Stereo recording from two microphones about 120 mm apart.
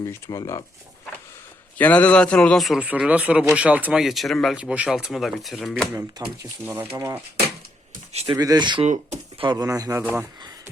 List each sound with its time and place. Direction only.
0.0 s speech: 30° left (ahead or behind)
1.8 s a man's voice: 10° left (ahead or behind)
2.8 s speech: 10° right (ahead or behind)
4.0 s speech: centre (ahead or behind)
6.4 s speech: 20° right (ahead or behind)
8.3 s speech: 35° right (ahead or behind)
8.8 s speech: 65° right (ahead or behind)
9.4 s speech: 35° right (ahead or behind)
10.0 s speech: 15° right (ahead or behind)